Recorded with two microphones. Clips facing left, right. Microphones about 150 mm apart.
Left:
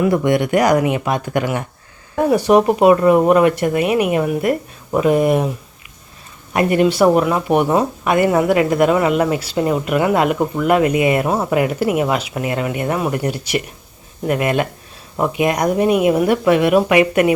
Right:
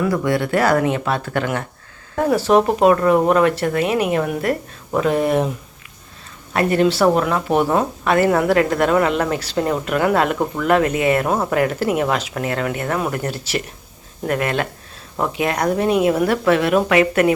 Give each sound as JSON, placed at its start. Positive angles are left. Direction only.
{"t": 0.0, "sound": "speech", "side_deg": 20}
{"t": 6.5, "sound": "speech", "side_deg": 15}